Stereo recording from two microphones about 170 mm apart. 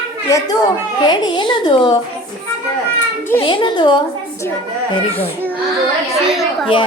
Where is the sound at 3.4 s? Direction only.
30° left (ahead or behind).